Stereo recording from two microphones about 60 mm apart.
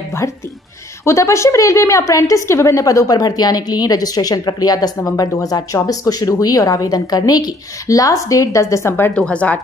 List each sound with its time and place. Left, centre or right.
1.0 s a woman's voice: left
9.1 s a woman's voice: centre